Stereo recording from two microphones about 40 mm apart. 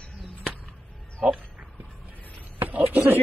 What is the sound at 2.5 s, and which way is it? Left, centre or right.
Speech, right.